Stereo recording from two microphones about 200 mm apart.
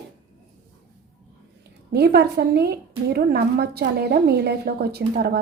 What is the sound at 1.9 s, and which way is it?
A woman's voice, 55° right (ahead or behind).